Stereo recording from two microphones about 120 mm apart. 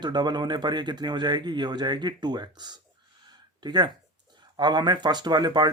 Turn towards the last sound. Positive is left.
turn(degrees=-35)  # may be behind; listen again after turning